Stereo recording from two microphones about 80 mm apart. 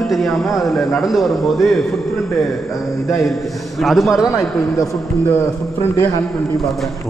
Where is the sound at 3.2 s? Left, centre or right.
Centre.